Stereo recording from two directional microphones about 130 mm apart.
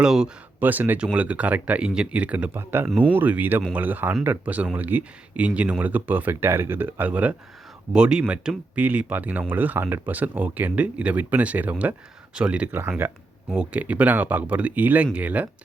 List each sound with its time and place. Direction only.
0.0 s speech: 5° right (ahead or behind)